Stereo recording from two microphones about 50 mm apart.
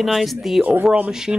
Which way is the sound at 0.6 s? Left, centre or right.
Right.